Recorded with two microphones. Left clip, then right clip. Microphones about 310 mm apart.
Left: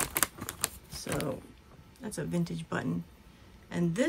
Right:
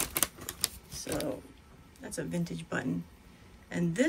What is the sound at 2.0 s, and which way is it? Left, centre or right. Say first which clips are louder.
Speech: left 1 dB; centre.